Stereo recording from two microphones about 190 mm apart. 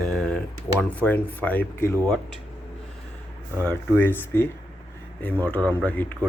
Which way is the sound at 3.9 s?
10° left (ahead or behind).